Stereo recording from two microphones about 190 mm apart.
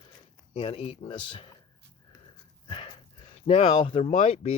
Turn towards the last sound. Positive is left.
turn(degrees=35)  # may be behind; listen again after turning